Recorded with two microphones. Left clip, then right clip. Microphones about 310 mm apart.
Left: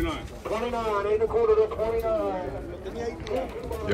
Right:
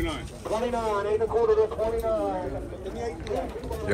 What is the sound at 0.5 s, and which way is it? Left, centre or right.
Speech, centre.